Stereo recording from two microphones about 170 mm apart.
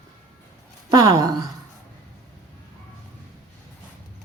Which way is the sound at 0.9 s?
20° right (ahead or behind).